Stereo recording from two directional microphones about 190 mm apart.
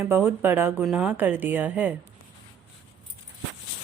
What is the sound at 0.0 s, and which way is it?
A woman's voice, 10° right (ahead or behind).